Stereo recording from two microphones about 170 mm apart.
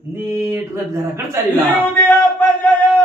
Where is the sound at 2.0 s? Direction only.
10° left (ahead or behind).